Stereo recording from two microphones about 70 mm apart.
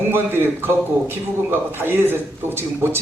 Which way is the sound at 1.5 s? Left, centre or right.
Right.